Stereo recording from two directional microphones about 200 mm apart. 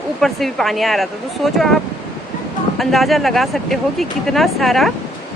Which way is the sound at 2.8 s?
Centre (ahead or behind).